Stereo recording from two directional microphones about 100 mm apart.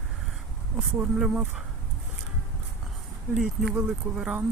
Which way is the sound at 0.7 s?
10° right (ahead or behind).